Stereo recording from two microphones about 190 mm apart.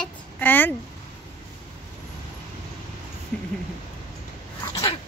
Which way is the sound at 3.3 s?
5° left (ahead or behind).